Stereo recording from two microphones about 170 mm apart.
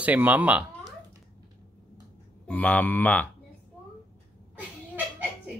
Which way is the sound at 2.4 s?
10° left (ahead or behind).